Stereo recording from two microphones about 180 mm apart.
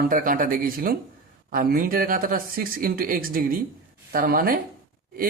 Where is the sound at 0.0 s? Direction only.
55° right (ahead or behind).